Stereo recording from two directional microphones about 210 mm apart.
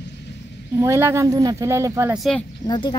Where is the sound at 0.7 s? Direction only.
15° right (ahead or behind).